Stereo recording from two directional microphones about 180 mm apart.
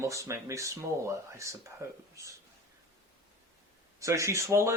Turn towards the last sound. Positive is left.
turn(degrees=-15)  # may be behind; listen again after turning